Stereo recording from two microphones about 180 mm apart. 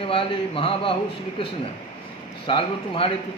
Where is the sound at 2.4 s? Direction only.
30° left (ahead or behind).